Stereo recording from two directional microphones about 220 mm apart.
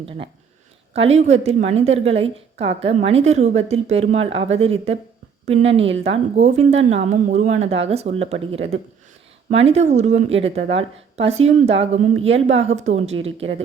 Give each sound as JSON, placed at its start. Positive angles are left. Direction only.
{"t": 0.9, "sound": "a woman's voice", "side_deg": -30}